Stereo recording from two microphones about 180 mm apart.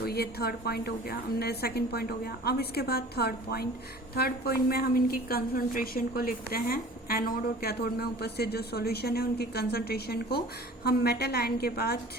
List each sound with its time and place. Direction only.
0.0 s a woman's voice: 60° left (ahead or behind)